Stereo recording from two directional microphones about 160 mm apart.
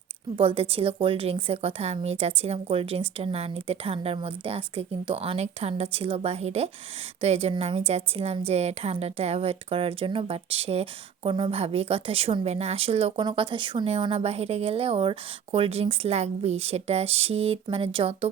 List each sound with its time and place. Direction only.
0.3 s a woman's voice: 35° right (ahead or behind)